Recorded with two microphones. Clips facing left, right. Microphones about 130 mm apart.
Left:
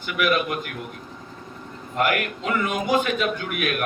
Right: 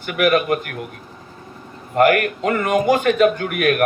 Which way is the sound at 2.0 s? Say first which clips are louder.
Right 8 dB; 50° right (ahead or behind).